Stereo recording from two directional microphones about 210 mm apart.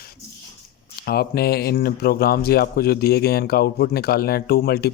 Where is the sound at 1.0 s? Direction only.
45° left (ahead or behind).